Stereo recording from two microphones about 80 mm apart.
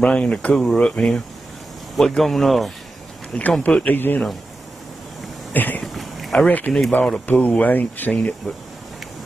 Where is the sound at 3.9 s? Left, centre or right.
Left.